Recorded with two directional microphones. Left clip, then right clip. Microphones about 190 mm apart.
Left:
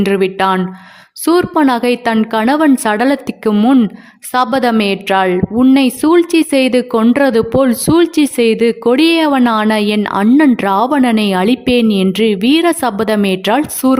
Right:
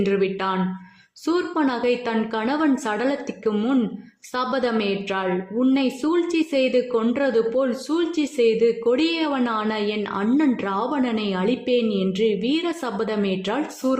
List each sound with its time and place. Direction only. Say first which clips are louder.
0.0 s a woman's voice: left 9 dB; 40° left (ahead or behind)